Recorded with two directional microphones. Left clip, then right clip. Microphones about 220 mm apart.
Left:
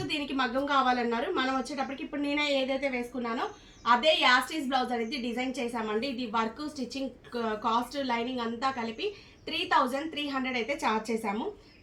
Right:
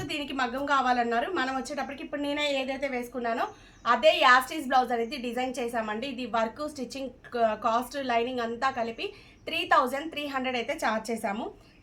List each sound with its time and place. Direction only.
0.3 s a woman's voice: 20° right (ahead or behind)